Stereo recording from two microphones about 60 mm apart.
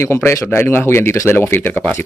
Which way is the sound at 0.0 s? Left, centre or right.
Left.